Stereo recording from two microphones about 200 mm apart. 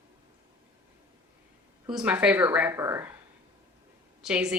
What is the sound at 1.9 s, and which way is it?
Speech, 5° right (ahead or behind).